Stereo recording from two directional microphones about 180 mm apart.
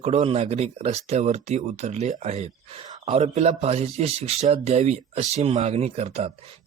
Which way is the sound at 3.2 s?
35° right (ahead or behind).